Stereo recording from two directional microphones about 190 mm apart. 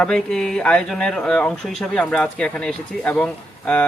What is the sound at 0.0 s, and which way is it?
Speech, 5° left (ahead or behind).